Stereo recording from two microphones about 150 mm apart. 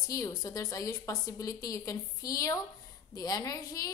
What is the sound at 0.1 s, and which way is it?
A woman's voice, 25° left (ahead or behind).